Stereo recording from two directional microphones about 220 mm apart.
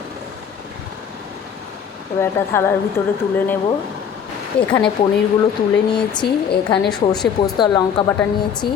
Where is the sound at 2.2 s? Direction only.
10° left (ahead or behind).